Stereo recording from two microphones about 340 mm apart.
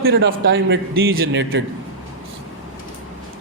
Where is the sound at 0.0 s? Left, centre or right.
Right.